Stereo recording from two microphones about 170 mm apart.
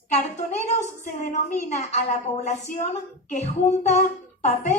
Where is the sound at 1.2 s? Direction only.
45° left (ahead or behind).